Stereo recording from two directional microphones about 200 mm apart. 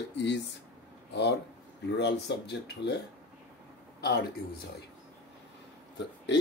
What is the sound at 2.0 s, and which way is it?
Speech, 60° left (ahead or behind).